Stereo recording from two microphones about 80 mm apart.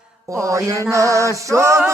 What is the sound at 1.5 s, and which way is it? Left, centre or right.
Chant, right.